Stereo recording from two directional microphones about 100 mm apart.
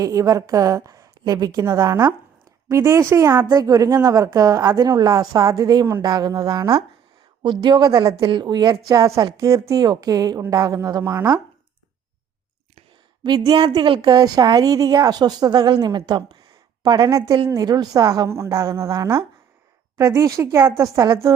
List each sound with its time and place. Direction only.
0.0 s speech: 35° right (ahead or behind)
2.6 s a woman's voice: 30° right (ahead or behind)
8.9 s speech: 35° right (ahead or behind)
13.2 s a woman's voice: 45° right (ahead or behind)
17.1 s speech: 30° right (ahead or behind)